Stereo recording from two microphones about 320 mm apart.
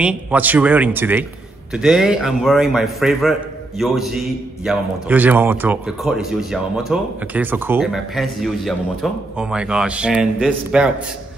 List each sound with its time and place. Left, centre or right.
0.0 s a man's voice: centre